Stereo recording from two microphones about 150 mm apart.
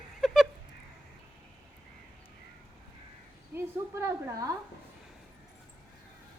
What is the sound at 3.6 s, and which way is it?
Speech, 20° right (ahead or behind).